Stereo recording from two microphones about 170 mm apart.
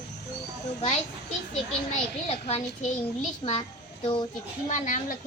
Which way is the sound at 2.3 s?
35° left (ahead or behind).